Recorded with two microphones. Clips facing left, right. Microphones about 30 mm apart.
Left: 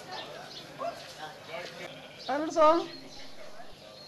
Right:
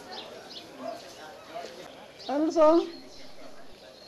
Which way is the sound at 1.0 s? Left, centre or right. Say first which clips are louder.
Left 1 dB; left.